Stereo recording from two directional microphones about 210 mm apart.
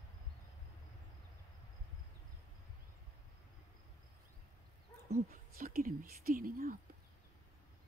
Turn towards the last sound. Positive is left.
turn(degrees=-40)  # may be behind; listen again after turning